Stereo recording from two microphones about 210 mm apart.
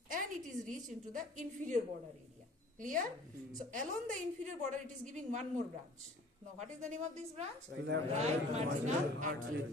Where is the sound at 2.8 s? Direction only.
40° right (ahead or behind).